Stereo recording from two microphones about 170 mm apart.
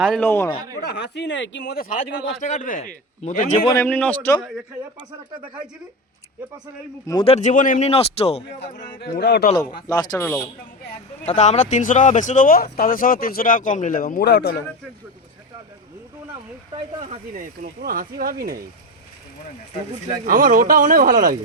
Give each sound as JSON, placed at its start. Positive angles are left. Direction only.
{"t": 0.0, "sound": "a man's voice", "side_deg": 5}
{"t": 0.8, "sound": "speech", "side_deg": 80}
{"t": 2.0, "sound": "speech", "side_deg": 45}
{"t": 3.7, "sound": "a man's voice", "side_deg": 15}
{"t": 7.1, "sound": "speech", "side_deg": 25}
{"t": 7.3, "sound": "a man's voice", "side_deg": 45}
{"t": 9.0, "sound": "a man's voice", "side_deg": 70}
{"t": 9.6, "sound": "speech", "side_deg": 20}
{"t": 10.2, "sound": "a man's voice", "side_deg": 5}
{"t": 11.3, "sound": "speech", "side_deg": 45}
{"t": 17.0, "sound": "speech", "side_deg": -45}
{"t": 20.2, "sound": "speech", "side_deg": -55}